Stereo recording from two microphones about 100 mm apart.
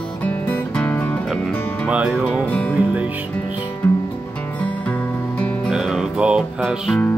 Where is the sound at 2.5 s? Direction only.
15° left (ahead or behind).